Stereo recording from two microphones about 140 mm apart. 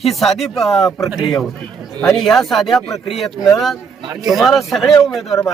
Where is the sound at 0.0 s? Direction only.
Centre (ahead or behind).